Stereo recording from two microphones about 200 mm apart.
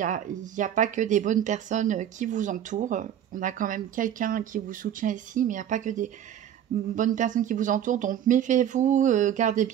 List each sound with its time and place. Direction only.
0.0 s speech: 40° right (ahead or behind)